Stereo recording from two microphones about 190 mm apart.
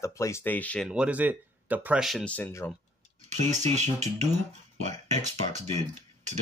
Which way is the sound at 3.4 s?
35° right (ahead or behind).